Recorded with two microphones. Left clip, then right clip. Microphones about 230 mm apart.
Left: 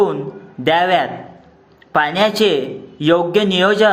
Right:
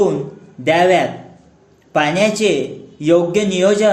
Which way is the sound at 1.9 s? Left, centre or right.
Centre.